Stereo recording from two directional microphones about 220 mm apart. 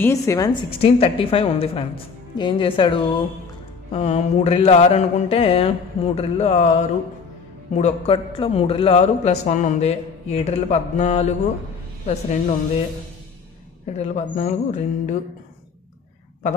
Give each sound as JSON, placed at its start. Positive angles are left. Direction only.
{"t": 0.0, "sound": "a man's voice", "side_deg": 10}
{"t": 13.8, "sound": "speech", "side_deg": 30}